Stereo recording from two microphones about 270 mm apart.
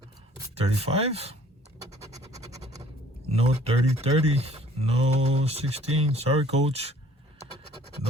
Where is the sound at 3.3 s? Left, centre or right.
Right.